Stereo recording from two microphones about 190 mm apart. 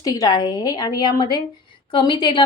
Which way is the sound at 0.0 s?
20° left (ahead or behind).